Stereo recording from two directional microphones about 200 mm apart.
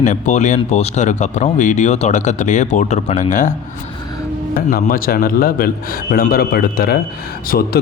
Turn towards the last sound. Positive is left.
turn(degrees=50)  # may be behind; listen again after turning